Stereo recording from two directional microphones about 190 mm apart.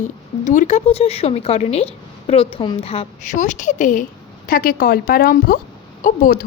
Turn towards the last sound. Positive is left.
turn(degrees=45)  # may be behind; listen again after turning